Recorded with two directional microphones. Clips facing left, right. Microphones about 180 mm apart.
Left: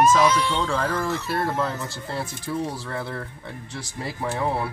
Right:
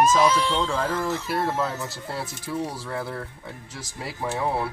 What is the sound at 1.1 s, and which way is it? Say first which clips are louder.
Speech: even; 10° right (ahead or behind).